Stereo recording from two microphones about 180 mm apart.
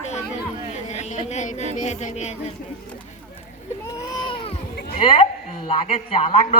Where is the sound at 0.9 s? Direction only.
40° left (ahead or behind).